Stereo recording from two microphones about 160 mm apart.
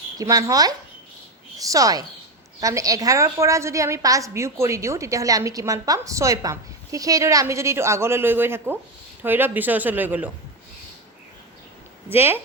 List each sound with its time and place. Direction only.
0.2 s a woman's voice: 20° right (ahead or behind)
12.0 s speech: 15° right (ahead or behind)